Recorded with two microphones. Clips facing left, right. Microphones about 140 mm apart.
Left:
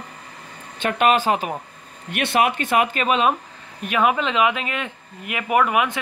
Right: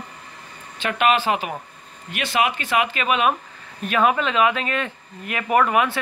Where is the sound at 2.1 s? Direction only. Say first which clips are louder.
Left 2 dB; 55° left (ahead or behind); by 3.3 s 30° left (ahead or behind).